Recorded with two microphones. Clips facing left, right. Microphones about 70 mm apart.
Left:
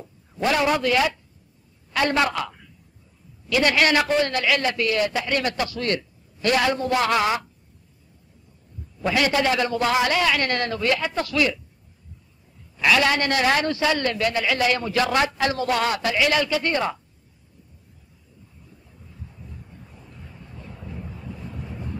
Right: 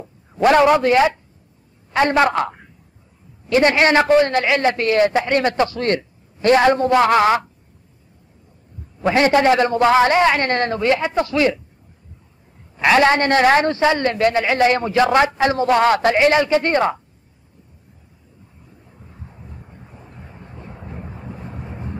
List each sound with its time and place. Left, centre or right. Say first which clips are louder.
0.4 s a man's voice: right 8 dB; right
9.0 s a man's voice: right 7 dB; right
12.7 s a man's voice: right 6 dB; right
18.9 s vehicle: right 3 dB; right